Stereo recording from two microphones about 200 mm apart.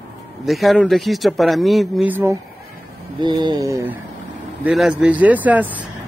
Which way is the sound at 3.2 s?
20° right (ahead or behind).